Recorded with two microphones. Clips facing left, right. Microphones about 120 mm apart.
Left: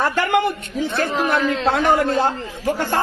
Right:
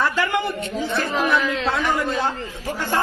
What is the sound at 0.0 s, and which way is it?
Speech, 60° left (ahead or behind).